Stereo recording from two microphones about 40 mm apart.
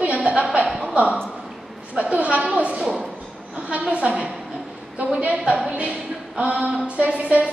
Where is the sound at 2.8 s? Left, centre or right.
Centre.